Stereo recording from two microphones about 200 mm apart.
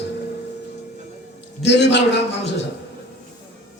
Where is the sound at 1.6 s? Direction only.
60° left (ahead or behind).